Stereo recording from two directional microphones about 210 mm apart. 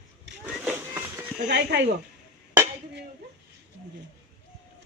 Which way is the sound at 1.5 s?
55° right (ahead or behind).